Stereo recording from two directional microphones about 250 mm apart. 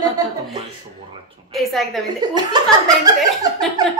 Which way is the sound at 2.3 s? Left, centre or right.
Centre.